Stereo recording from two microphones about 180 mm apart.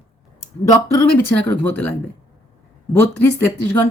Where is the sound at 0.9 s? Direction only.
10° left (ahead or behind).